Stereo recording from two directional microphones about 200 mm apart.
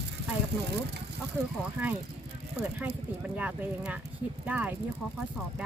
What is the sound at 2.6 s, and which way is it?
Speech, 10° right (ahead or behind).